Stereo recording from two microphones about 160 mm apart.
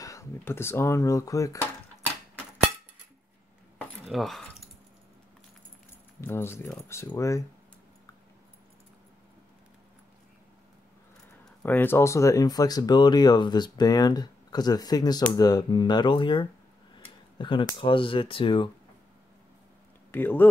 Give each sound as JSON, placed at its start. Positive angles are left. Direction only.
{"t": 0.0, "sound": "speech", "side_deg": 20}
{"t": 3.7, "sound": "keys jangling", "side_deg": 0}
{"t": 6.2, "sound": "speech", "side_deg": 15}
{"t": 11.6, "sound": "speech", "side_deg": 10}
{"t": 20.1, "sound": "speech", "side_deg": 10}